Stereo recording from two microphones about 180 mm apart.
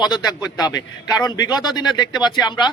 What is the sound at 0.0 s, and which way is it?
A man's voice, 20° left (ahead or behind).